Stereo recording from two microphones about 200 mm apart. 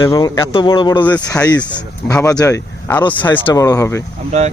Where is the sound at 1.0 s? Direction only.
5° left (ahead or behind).